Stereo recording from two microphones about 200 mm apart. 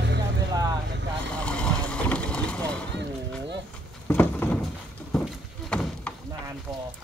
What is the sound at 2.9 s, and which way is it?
Music, 60° right (ahead or behind).